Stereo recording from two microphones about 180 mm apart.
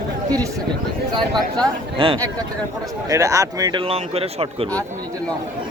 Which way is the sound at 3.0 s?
15° right (ahead or behind).